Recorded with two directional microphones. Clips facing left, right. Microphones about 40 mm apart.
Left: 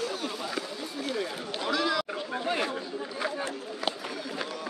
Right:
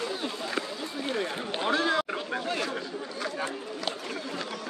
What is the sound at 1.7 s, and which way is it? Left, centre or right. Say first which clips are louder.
Chatter: right 2 dB; right.